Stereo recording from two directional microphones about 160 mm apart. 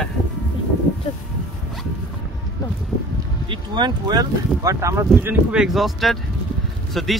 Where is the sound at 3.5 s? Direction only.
30° right (ahead or behind).